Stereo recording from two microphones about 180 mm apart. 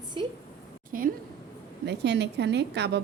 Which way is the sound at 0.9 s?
50° right (ahead or behind).